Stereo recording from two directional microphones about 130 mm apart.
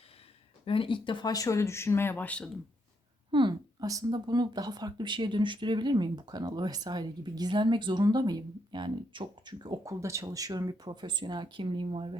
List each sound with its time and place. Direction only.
0.6 s speech: 45° left (ahead or behind); by 2.5 s 10° left (ahead or behind)
3.3 s a sound: 40° right (ahead or behind)
3.8 s speech: 30° right (ahead or behind)